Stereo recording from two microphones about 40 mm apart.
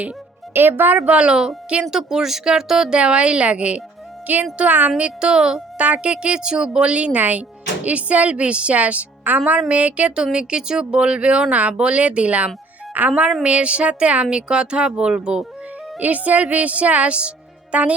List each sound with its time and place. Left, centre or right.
0.5 s speech: right
0.9 s speech: right
1.2 s speech: right
2.9 s speech: right
4.3 s speech: right
4.9 s speech: right
5.7 s a woman's voice: right
10.3 s a woman's voice: right
16.0 s speech: right